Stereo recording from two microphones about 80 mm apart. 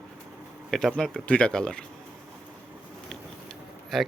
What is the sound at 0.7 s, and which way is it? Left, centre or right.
Speech, centre.